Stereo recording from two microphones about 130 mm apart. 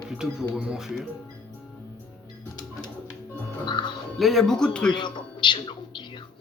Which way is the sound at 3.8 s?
35° left (ahead or behind).